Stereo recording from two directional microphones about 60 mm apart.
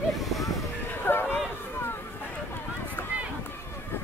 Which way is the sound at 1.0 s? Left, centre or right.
Left.